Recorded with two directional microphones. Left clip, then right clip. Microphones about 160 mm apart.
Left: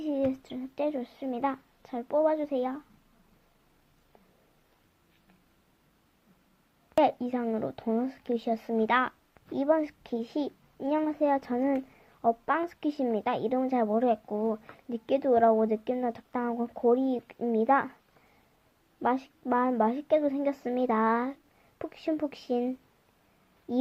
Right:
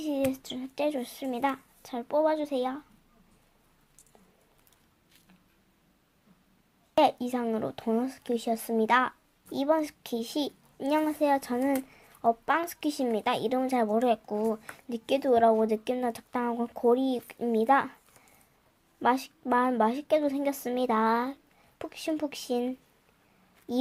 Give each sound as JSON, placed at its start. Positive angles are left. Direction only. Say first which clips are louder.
{"t": 0.3, "sound": "a woman's voice", "louder": "even", "side_deg": 0}
{"t": 6.9, "sound": "speech", "louder": "right 1 dB", "side_deg": 0}
{"t": 19.0, "sound": "speech", "louder": "right 2 dB", "side_deg": -5}